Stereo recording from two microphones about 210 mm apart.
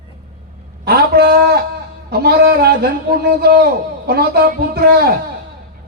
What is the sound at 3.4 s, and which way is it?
Speech, 50° right (ahead or behind).